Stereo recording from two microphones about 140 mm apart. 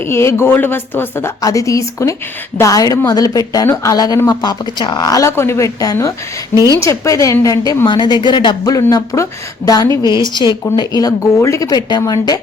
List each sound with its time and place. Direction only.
0.1 s speech: 20° left (ahead or behind)